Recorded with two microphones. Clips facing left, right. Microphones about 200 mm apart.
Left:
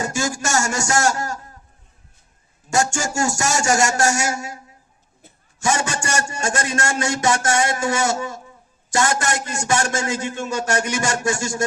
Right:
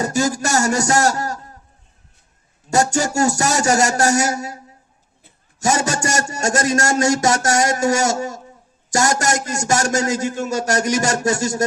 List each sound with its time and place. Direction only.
0.0 s a man's voice: 40° right (ahead or behind)
2.6 s a man's voice: 40° right (ahead or behind)